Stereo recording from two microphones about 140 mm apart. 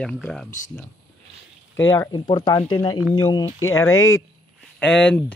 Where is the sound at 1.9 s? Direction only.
25° left (ahead or behind).